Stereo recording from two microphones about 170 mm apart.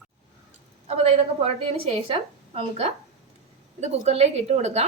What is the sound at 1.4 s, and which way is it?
A woman's voice, 35° right (ahead or behind).